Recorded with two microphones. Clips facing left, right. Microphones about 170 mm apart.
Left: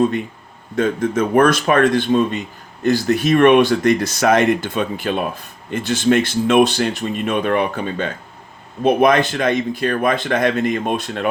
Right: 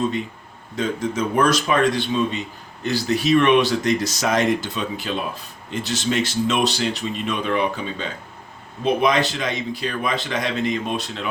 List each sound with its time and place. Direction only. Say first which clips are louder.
0.8 s speech: left 5 dB; 55° left (ahead or behind)